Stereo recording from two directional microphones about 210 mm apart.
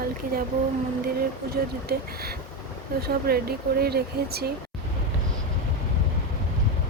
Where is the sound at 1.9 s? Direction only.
50° right (ahead or behind).